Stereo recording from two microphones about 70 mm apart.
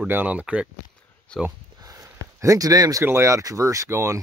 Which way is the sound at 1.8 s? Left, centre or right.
Right.